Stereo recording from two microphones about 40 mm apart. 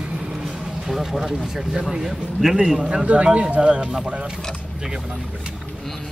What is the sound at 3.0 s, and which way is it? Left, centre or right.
Speech, right.